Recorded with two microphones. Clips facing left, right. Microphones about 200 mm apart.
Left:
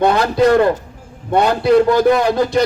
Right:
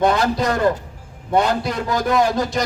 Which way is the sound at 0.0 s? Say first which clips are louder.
Left 5 dB; 60° left (ahead or behind).